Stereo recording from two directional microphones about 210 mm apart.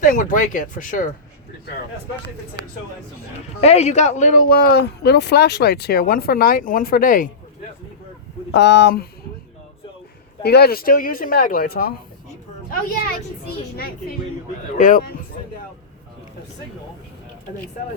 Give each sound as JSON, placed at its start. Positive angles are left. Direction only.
{"t": 0.0, "sound": "speech", "side_deg": 40}
{"t": 3.6, "sound": "speech", "side_deg": 30}
{"t": 8.5, "sound": "speech", "side_deg": 55}
{"t": 10.4, "sound": "speech", "side_deg": 50}
{"t": 14.8, "sound": "speech", "side_deg": 40}